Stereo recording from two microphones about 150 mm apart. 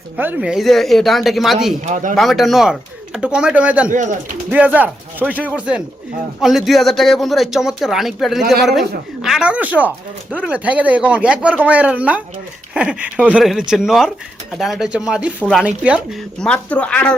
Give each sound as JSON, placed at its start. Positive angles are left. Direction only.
{"t": 0.2, "sound": "speech", "side_deg": -15}
{"t": 0.5, "sound": "speech", "side_deg": 0}
{"t": 1.8, "sound": "speech", "side_deg": -55}
{"t": 2.1, "sound": "speech", "side_deg": 0}
{"t": 3.8, "sound": "speech", "side_deg": -55}
{"t": 4.4, "sound": "speech", "side_deg": -10}
{"t": 16.4, "sound": "a woman's voice", "side_deg": 10}